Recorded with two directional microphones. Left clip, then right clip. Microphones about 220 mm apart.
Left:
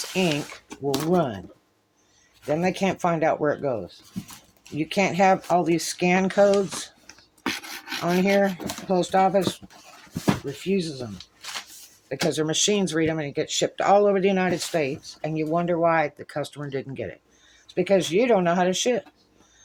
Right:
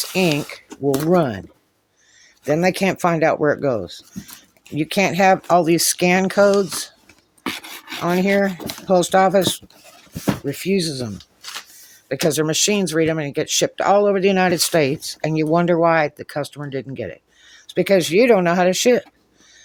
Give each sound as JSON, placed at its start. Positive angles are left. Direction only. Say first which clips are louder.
{"t": 0.0, "sound": "a sound", "louder": "right 6 dB", "side_deg": -35}
{"t": 0.7, "sound": "speech", "louder": "right 6 dB", "side_deg": -20}
{"t": 1.0, "sound": "speech", "louder": "right 5 dB", "side_deg": -40}
{"t": 2.5, "sound": "speech", "louder": "right 6 dB", "side_deg": -45}
{"t": 7.4, "sound": "a sound", "louder": "right 2 dB", "side_deg": -20}
{"t": 8.0, "sound": "speech", "louder": "right 3 dB", "side_deg": -30}
{"t": 10.6, "sound": "speech", "louder": "right 6 dB", "side_deg": -55}
{"t": 12.2, "sound": "speech", "louder": "right 5 dB", "side_deg": -35}
{"t": 13.8, "sound": "speech", "louder": "right 3 dB", "side_deg": -25}
{"t": 17.5, "sound": "speech", "louder": "right 5 dB", "side_deg": -45}